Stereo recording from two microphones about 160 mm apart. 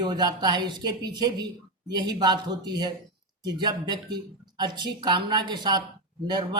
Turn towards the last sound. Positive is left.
turn(degrees=-25)  # may be behind; listen again after turning